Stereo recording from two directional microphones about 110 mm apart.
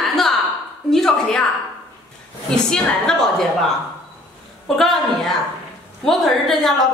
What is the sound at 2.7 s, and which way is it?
Speech, 5° left (ahead or behind).